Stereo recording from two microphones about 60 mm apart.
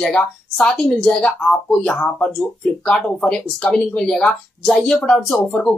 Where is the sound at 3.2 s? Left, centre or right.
Centre.